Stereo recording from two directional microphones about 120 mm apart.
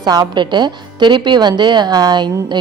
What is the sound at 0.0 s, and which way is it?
A woman's voice, 40° right (ahead or behind).